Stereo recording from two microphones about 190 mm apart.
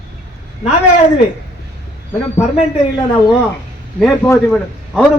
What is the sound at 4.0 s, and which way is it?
Speech, 10° left (ahead or behind).